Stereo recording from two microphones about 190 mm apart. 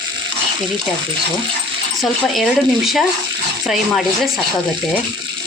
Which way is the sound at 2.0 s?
Centre (ahead or behind).